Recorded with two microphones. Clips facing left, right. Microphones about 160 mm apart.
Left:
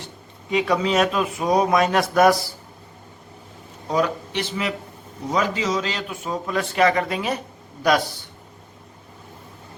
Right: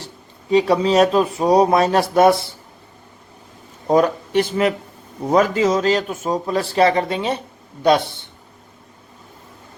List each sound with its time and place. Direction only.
0.5 s a man's voice: 30° right (ahead or behind)
3.8 s a man's voice: 45° right (ahead or behind); by 8.3 s 25° right (ahead or behind)